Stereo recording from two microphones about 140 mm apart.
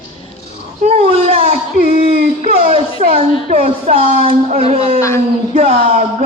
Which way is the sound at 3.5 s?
45° right (ahead or behind).